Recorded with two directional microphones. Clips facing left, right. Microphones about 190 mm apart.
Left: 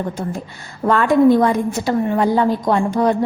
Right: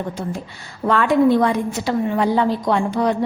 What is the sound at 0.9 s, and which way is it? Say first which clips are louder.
A woman's voice: left 3 dB; 45° left (ahead or behind).